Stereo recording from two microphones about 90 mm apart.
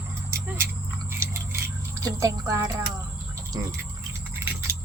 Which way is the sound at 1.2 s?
30° right (ahead or behind).